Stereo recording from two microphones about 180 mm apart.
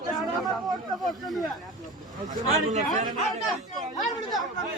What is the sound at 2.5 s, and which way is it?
Speech, 40° right (ahead or behind).